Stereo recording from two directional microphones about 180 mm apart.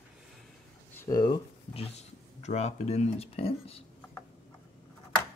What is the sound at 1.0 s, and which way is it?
Speech, 20° left (ahead or behind).